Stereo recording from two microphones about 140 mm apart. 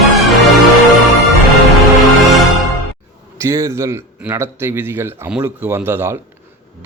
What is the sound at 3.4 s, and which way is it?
Speech, 20° right (ahead or behind).